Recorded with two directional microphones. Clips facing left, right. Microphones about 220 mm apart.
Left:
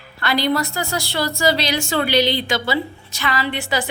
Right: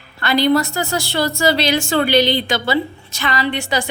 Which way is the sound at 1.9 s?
50° right (ahead or behind).